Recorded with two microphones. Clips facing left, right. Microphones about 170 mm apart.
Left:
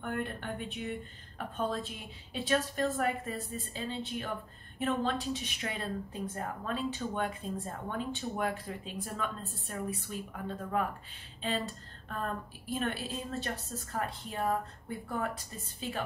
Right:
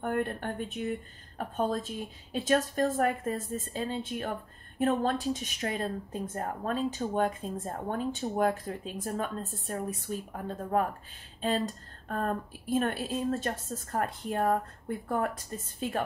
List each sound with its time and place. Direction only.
0.0 s a woman's voice: 50° right (ahead or behind)